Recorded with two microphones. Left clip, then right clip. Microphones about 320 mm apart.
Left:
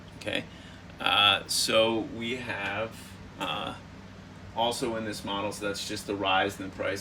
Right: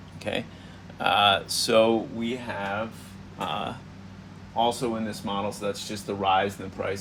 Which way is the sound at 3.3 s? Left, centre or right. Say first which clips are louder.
Right 3 dB; centre.